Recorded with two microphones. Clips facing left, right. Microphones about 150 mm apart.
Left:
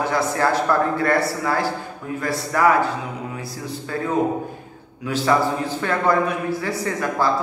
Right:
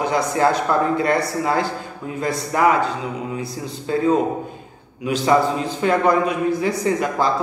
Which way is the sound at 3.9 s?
20° right (ahead or behind).